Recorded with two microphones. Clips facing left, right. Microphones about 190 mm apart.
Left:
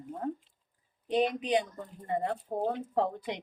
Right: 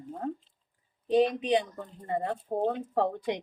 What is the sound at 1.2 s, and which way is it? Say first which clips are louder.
A woman's voice: right 3 dB; 25° right (ahead or behind).